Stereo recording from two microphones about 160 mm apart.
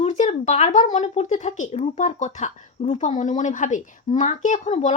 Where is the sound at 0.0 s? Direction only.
45° left (ahead or behind).